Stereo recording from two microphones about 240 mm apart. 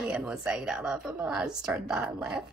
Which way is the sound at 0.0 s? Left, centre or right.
Centre.